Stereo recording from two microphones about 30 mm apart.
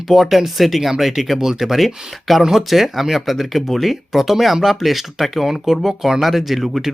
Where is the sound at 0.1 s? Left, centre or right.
Centre.